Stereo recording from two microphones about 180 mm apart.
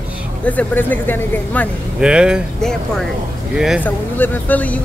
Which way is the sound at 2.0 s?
5° right (ahead or behind).